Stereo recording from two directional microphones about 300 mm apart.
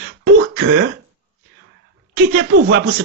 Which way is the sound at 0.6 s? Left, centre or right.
Right.